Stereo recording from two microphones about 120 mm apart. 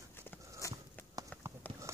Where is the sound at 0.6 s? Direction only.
25° left (ahead or behind).